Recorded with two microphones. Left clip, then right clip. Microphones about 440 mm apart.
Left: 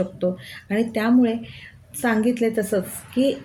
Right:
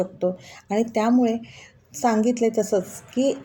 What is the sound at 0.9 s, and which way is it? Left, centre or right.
Speech, left.